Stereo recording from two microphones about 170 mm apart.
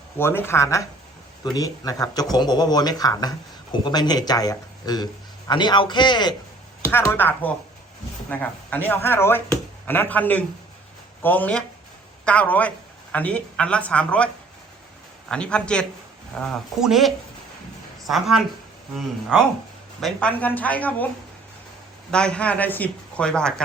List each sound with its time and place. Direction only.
0.2 s speech: 15° left (ahead or behind)
6.8 s speech: 15° left (ahead or behind)
15.3 s speech: 5° left (ahead or behind)
22.1 s speech: 5° left (ahead or behind)